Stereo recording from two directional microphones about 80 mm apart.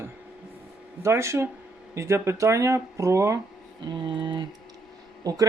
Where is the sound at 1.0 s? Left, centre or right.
Right.